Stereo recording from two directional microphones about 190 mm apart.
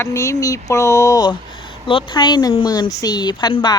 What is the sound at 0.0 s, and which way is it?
Speech, 15° left (ahead or behind).